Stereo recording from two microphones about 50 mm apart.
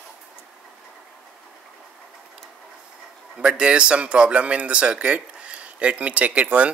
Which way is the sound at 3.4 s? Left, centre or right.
Right.